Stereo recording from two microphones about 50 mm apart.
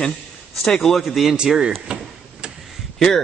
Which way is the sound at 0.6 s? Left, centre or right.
Centre.